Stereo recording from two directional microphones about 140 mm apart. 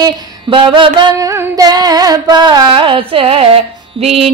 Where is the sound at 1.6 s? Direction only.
30° right (ahead or behind).